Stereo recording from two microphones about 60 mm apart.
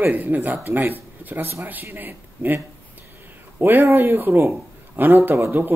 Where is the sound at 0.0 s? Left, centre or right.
Right.